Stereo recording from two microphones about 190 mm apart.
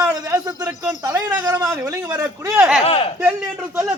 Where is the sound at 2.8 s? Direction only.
30° left (ahead or behind).